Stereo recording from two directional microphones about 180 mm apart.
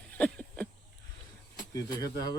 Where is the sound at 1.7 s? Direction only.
20° left (ahead or behind).